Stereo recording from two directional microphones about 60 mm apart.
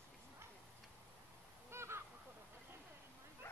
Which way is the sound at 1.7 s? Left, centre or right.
Right.